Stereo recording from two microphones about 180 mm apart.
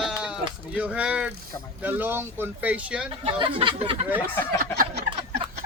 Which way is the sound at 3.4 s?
30° right (ahead or behind).